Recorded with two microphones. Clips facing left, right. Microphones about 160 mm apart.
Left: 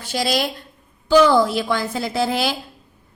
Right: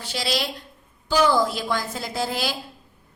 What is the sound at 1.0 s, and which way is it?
A woman's voice, 65° left (ahead or behind).